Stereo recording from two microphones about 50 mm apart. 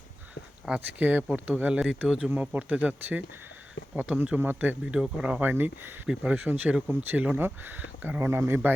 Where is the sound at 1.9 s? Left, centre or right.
Centre.